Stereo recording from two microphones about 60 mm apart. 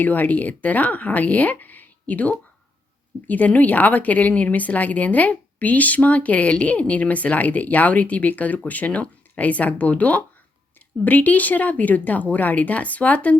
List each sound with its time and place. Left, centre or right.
0.0 s speech: left